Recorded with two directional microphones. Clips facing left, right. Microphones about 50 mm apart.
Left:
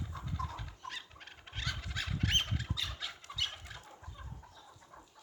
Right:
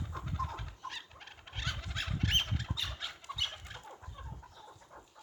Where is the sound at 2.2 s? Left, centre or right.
Centre.